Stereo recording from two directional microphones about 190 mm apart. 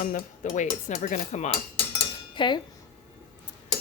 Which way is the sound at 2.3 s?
25° left (ahead or behind).